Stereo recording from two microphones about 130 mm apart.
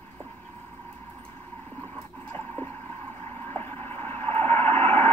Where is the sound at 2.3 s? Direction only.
15° left (ahead or behind).